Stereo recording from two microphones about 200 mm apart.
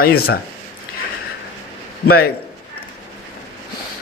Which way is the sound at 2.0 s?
50° left (ahead or behind).